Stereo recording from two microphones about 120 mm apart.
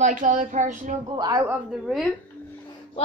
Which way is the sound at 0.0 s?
90° right.